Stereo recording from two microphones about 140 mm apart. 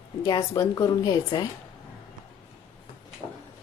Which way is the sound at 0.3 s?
25° left (ahead or behind).